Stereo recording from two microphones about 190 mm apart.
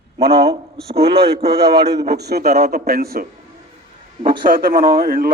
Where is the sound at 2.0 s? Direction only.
60° right (ahead or behind).